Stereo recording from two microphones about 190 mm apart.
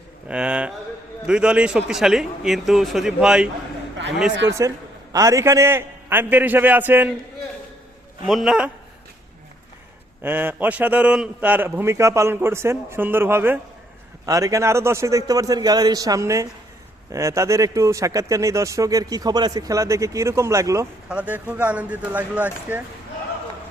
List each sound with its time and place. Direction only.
0.3 s speech: 5° right (ahead or behind)
4.4 s speech: 15° right (ahead or behind)
8.3 s speech: centre (ahead or behind)
10.2 s speech: 10° right (ahead or behind)